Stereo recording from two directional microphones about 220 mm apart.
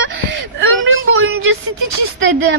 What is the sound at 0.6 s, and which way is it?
Speech, 65° right (ahead or behind).